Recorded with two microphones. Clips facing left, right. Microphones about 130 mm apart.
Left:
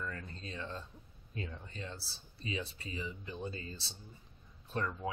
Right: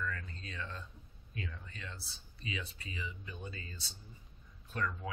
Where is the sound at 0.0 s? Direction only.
30° left (ahead or behind).